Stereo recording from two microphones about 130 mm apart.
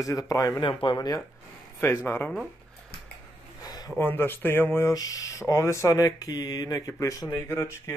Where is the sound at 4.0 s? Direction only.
15° left (ahead or behind).